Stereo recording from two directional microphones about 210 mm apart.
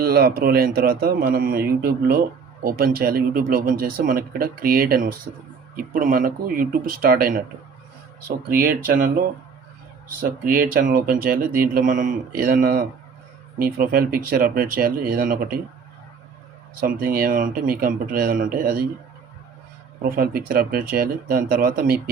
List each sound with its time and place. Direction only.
0.0 s speech: 45° right (ahead or behind)
8.4 s speech: 45° right (ahead or behind)
10.2 s speech: 40° right (ahead or behind)
16.8 s speech: 45° right (ahead or behind)
20.1 s speech: 45° right (ahead or behind)